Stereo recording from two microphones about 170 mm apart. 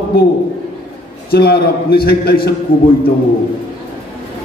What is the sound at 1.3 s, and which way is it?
A man's voice, 65° left (ahead or behind).